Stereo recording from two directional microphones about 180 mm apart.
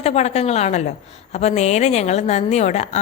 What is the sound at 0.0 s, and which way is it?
A woman's voice, 35° left (ahead or behind).